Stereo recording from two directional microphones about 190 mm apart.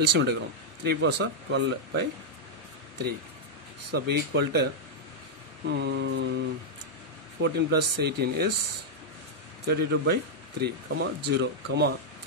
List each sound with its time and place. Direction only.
0.0 s speech: 60° right (ahead or behind)
3.9 s speech: 60° right (ahead or behind)
5.7 s speech: 65° right (ahead or behind)
7.4 s speech: 60° right (ahead or behind)
9.7 s speech: 55° right (ahead or behind)